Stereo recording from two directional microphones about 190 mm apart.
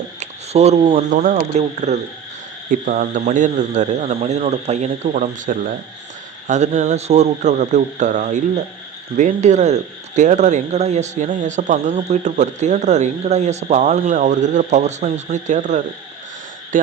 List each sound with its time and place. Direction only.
0.2 s a sound: 35° right (ahead or behind)
1.1 s speech: 40° right (ahead or behind)
2.6 s speech: 50° right (ahead or behind)